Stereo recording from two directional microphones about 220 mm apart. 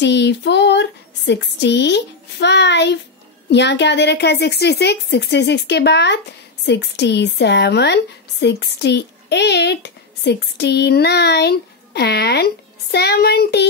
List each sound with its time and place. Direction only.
0.0 s speech: 50° left (ahead or behind)